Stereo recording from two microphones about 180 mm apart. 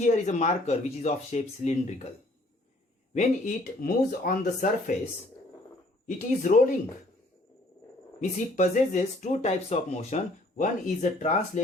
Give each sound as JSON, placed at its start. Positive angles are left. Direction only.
{"t": 0.0, "sound": "speech", "side_deg": 40}
{"t": 3.2, "sound": "speech", "side_deg": 50}
{"t": 6.1, "sound": "speech", "side_deg": 45}
{"t": 8.2, "sound": "speech", "side_deg": 40}